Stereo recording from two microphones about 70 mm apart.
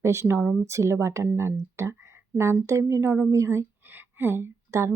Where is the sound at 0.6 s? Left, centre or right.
Right.